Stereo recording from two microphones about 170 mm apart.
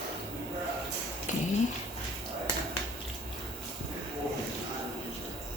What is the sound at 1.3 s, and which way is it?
Cat, 45° left (ahead or behind).